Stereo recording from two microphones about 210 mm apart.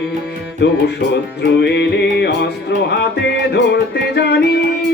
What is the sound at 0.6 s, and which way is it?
Music, 55° left (ahead or behind).